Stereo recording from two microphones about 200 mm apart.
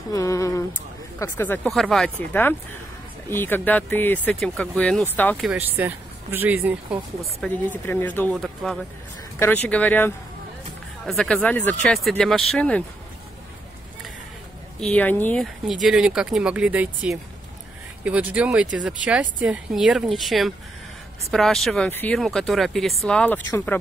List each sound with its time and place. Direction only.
0.1 s speech: 15° left (ahead or behind)
5.5 s speech: 10° right (ahead or behind)
7.4 s speech: 10° left (ahead or behind)
14.8 s speech: 5° left (ahead or behind)